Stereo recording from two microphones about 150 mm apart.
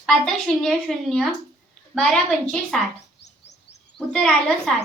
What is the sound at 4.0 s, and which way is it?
Speech, 5° left (ahead or behind).